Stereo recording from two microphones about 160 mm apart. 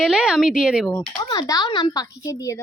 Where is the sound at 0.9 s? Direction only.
25° left (ahead or behind).